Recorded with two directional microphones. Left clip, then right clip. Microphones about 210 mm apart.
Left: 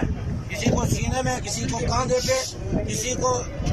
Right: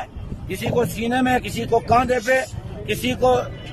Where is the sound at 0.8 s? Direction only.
50° right (ahead or behind).